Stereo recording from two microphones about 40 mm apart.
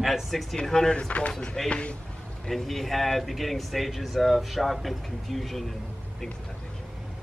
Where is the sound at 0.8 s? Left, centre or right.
Left.